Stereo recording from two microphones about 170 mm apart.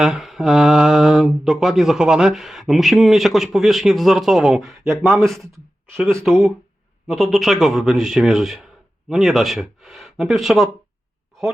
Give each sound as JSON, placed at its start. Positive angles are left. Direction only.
{"t": 0.0, "sound": "mantra", "side_deg": 0}
{"t": 6.0, "sound": "speech", "side_deg": -15}
{"t": 7.1, "sound": "mantra", "side_deg": 0}